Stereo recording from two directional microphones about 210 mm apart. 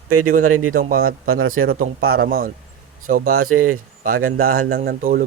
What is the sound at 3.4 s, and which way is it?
Speech, 90° right.